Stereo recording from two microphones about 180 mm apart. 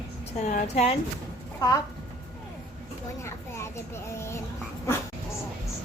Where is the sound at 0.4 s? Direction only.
45° left (ahead or behind).